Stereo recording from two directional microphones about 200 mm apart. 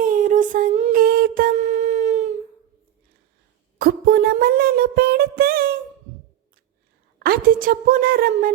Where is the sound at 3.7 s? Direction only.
50° right (ahead or behind).